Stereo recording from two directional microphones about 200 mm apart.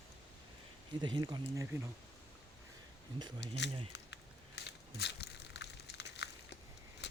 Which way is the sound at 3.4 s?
60° left (ahead or behind).